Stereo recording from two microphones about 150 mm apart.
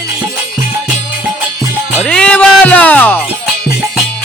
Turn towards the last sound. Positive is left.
turn(degrees=10)  # may be behind; listen again after turning